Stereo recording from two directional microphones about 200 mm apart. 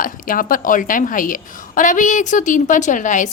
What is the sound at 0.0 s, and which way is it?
A woman's voice, 45° left (ahead or behind).